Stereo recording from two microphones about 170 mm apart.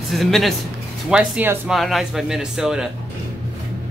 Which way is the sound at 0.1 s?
Centre (ahead or behind).